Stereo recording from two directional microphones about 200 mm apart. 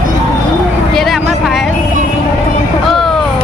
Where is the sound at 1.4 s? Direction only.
Centre (ahead or behind).